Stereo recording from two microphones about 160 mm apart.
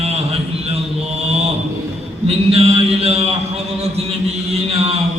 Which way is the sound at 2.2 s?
40° right (ahead or behind).